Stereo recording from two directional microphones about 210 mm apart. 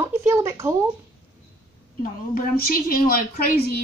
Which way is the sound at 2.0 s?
40° left (ahead or behind).